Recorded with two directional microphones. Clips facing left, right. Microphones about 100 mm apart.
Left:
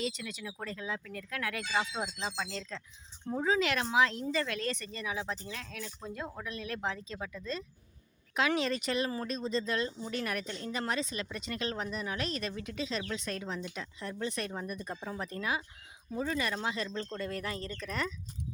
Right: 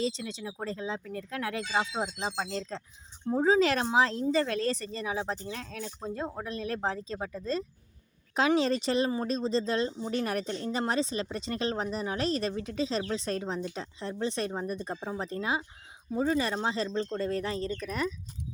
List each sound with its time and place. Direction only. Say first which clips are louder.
0.0 s speech: right 5 dB; 30° right (ahead or behind); by 18.1 s 15° right (ahead or behind)